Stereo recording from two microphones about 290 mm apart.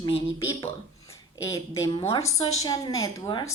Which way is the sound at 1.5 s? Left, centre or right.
Centre.